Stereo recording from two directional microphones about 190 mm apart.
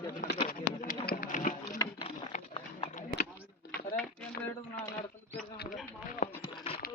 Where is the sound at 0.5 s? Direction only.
45° left (ahead or behind).